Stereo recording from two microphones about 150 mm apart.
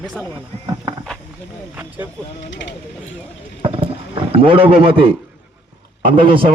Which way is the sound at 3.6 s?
40° right (ahead or behind).